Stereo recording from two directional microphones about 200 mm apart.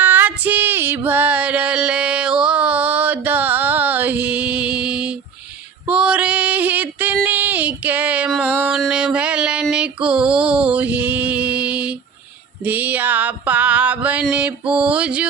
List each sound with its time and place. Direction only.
0.0 s female singing: 10° right (ahead or behind)
12.6 s a sound: 10° right (ahead or behind)
14.7 s music: 5° right (ahead or behind)